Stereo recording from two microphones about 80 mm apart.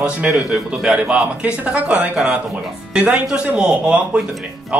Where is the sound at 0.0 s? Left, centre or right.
Centre.